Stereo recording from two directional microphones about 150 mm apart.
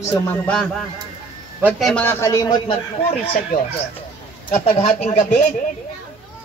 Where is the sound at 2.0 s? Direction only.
20° left (ahead or behind).